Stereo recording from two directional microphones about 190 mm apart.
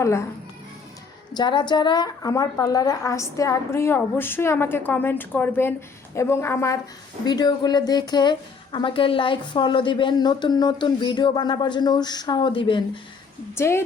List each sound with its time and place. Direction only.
0.0 s a woman's voice: 15° left (ahead or behind)
1.3 s a woman's voice: 25° left (ahead or behind)
13.6 s a woman's voice: 15° left (ahead or behind)